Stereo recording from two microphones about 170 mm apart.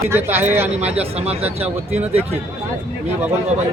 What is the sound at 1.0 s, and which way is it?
Speech, 35° right (ahead or behind).